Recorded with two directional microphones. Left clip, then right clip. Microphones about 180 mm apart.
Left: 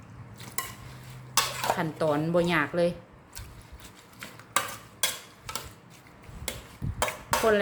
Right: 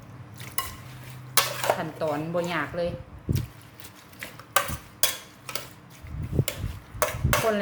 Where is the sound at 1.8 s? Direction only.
50° left (ahead or behind).